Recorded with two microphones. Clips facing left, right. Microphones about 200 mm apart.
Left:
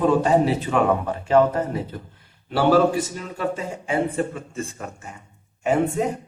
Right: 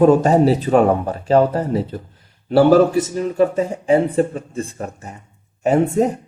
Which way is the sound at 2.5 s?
45° right (ahead or behind).